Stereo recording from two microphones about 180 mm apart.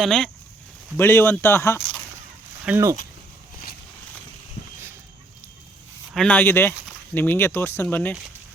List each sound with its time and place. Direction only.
0.0 s speech: 5° left (ahead or behind)
2.6 s speech: 15° right (ahead or behind)
6.1 s speech: 10° left (ahead or behind)